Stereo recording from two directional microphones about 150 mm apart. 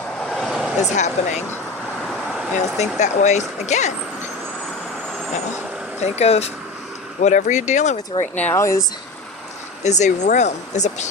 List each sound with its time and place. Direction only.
0.3 s a sound: centre (ahead or behind)
0.8 s speech: 50° left (ahead or behind)
2.6 s speech: 50° left (ahead or behind)
6.0 s speech: 45° left (ahead or behind)
8.4 s speech: 15° left (ahead or behind)
9.8 s speech: 50° left (ahead or behind)